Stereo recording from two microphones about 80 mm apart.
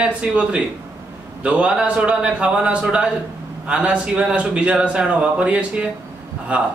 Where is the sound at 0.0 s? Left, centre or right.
Centre.